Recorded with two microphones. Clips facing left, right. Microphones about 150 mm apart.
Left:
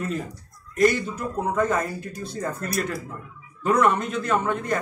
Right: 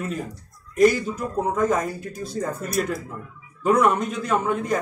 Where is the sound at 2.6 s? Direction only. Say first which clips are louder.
Right 2 dB; centre (ahead or behind).